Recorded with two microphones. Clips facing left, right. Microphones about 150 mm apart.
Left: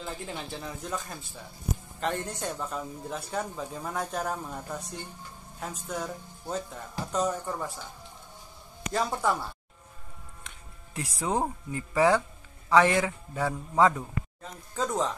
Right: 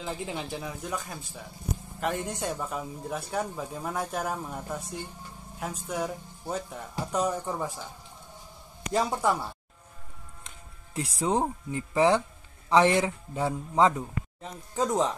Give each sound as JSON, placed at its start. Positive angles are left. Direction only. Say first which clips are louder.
{"t": 0.0, "sound": "a man's voice", "louder": "right 3 dB", "side_deg": -10}
{"t": 8.9, "sound": "speech", "louder": "right 2 dB", "side_deg": -10}
{"t": 11.0, "sound": "a man's voice", "louder": "right 2 dB", "side_deg": -25}